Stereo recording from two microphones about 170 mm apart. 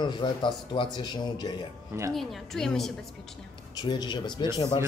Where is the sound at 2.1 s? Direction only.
Centre (ahead or behind).